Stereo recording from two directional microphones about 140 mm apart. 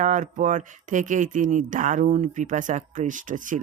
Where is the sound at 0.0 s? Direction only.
60° right (ahead or behind).